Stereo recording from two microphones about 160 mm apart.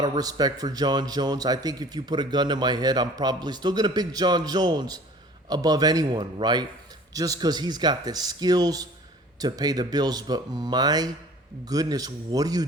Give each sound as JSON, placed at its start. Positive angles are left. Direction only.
{"t": 0.0, "sound": "a man's voice", "side_deg": -25}